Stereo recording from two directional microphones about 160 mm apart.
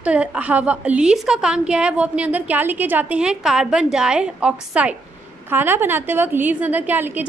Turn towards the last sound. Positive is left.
turn(degrees=-10)  # may be behind; listen again after turning